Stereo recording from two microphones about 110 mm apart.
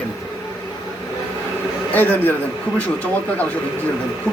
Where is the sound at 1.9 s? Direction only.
15° left (ahead or behind).